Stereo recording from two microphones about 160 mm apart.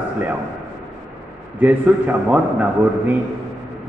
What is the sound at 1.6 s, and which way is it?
A man's voice, 10° right (ahead or behind).